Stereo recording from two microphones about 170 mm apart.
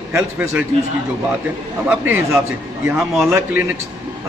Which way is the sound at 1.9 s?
15° right (ahead or behind).